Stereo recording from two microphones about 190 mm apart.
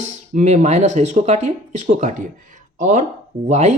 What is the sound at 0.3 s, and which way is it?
Speech, 40° right (ahead or behind).